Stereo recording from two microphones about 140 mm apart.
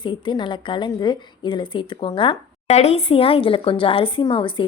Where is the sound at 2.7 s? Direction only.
50° left (ahead or behind).